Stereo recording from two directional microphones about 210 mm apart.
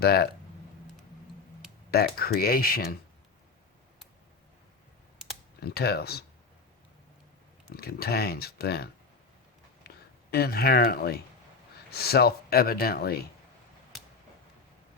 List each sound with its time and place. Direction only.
0.0 s speech: 50° left (ahead or behind)
1.9 s speech: 45° left (ahead or behind)
5.5 s speech: 50° left (ahead or behind)
7.7 s speech: 45° left (ahead or behind)
10.3 s speech: 45° left (ahead or behind)